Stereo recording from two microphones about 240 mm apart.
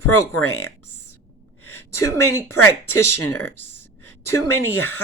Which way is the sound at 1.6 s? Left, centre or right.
Left.